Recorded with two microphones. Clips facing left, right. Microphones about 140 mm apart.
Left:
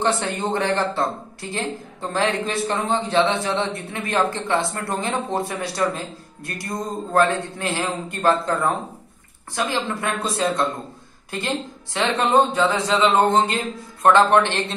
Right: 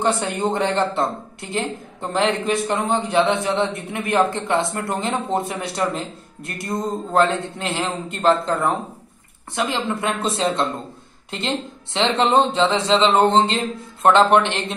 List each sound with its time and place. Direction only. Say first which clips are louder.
0.0 s a woman's voice: right 2 dB; 20° right (ahead or behind)